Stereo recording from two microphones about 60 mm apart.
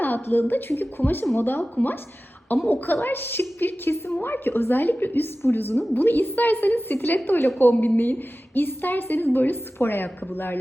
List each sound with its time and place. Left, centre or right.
0.0 s a woman's voice: left
1.5 s a woman's voice: left